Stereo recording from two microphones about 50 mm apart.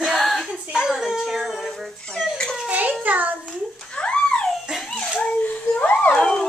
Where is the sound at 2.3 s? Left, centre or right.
Centre.